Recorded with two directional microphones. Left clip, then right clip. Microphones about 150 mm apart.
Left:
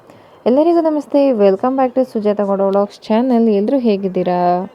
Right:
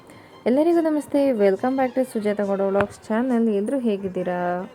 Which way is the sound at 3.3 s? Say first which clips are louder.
Left 8 dB; 25° left (ahead or behind).